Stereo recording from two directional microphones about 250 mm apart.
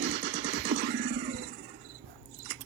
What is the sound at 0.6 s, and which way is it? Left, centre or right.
Music, right.